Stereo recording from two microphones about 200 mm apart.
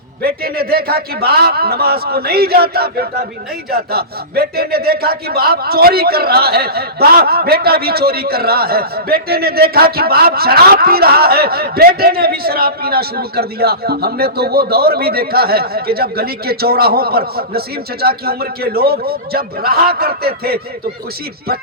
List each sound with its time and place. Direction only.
0.2 s speech: 50° right (ahead or behind)